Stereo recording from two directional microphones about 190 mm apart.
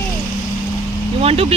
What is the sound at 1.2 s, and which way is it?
Speech, 30° right (ahead or behind).